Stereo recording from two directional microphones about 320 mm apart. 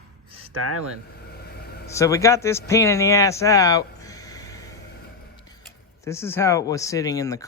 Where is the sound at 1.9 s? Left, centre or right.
Centre.